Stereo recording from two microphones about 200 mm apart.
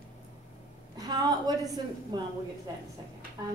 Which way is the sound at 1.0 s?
20° right (ahead or behind).